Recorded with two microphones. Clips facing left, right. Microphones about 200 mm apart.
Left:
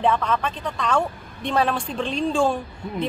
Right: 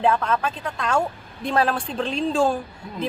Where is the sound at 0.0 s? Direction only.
Centre (ahead or behind).